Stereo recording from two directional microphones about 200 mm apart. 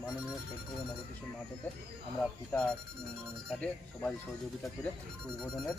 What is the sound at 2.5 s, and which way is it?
Speech, 10° left (ahead or behind).